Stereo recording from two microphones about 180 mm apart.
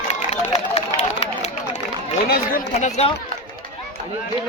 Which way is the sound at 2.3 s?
50° left (ahead or behind).